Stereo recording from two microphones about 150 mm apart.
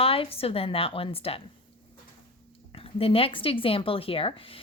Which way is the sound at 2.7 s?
40° left (ahead or behind).